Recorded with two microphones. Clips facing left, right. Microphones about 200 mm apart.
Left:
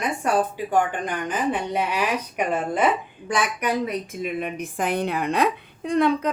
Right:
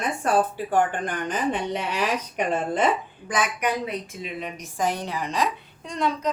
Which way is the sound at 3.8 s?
50° left (ahead or behind).